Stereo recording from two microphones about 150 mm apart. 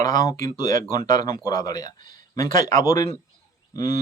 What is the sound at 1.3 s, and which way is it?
Speech, 25° left (ahead or behind).